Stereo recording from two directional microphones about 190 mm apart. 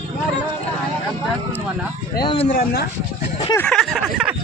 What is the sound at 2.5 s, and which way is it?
Speech, 50° left (ahead or behind).